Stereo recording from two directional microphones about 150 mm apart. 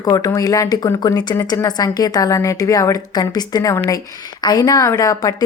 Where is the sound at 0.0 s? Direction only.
25° left (ahead or behind).